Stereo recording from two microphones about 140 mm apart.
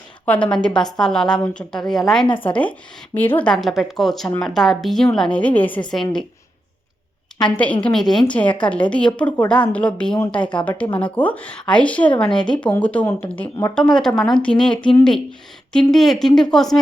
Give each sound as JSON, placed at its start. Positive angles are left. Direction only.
{"t": 0.4, "sound": "a woman's voice", "side_deg": 5}
{"t": 2.3, "sound": "speech", "side_deg": 40}
{"t": 3.2, "sound": "a woman's voice", "side_deg": 10}
{"t": 7.4, "sound": "speech", "side_deg": 10}
{"t": 10.4, "sound": "speech", "side_deg": 35}
{"t": 11.0, "sound": "speech", "side_deg": 10}
{"t": 13.7, "sound": "a woman's voice", "side_deg": 5}